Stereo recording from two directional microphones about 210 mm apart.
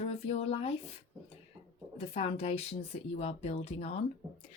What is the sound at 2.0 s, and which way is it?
Speech, 30° left (ahead or behind).